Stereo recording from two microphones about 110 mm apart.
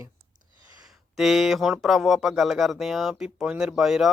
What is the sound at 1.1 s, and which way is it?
Speech, centre (ahead or behind).